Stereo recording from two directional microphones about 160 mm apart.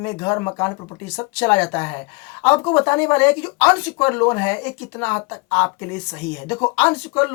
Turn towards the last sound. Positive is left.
turn(degrees=15)  # may be behind; listen again after turning